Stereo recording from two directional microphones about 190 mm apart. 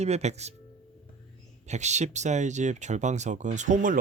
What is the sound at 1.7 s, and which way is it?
Speech, 35° right (ahead or behind).